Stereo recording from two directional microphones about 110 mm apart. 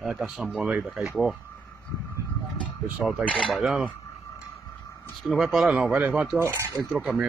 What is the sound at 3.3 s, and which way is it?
Speech, 5° left (ahead or behind).